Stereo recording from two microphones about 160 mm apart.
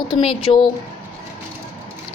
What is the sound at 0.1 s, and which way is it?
Speech, 30° left (ahead or behind).